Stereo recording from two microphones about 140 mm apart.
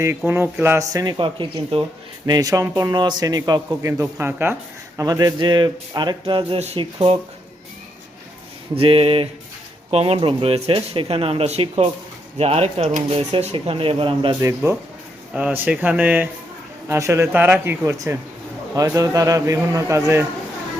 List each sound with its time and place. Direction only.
0.3 s a man's voice: 15° right (ahead or behind); by 6.6 s 35° right (ahead or behind)
6.6 s speech: 45° right (ahead or behind)
8.7 s speech: 40° right (ahead or behind)
14.4 s a man's voice: 20° right (ahead or behind)